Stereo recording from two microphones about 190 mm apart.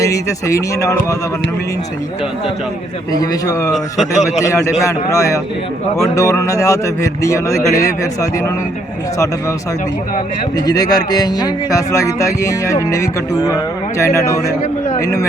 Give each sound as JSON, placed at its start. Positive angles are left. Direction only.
{"t": 0.0, "sound": "speech", "side_deg": 15}
{"t": 3.2, "sound": "speech", "side_deg": 20}
{"t": 4.8, "sound": "speech", "side_deg": 15}
{"t": 10.7, "sound": "speech", "side_deg": 20}